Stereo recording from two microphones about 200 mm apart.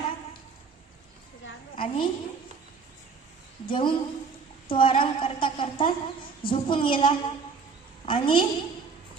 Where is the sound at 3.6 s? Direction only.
25° left (ahead or behind).